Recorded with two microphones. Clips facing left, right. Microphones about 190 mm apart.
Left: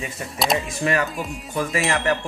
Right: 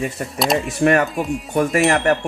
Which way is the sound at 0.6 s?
55° right (ahead or behind).